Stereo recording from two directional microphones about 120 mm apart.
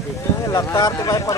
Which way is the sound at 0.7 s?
30° left (ahead or behind).